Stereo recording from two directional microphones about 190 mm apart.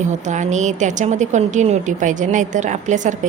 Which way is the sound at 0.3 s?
40° right (ahead or behind).